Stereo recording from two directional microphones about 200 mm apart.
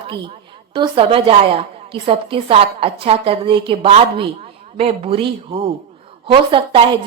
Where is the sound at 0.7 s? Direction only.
25° right (ahead or behind).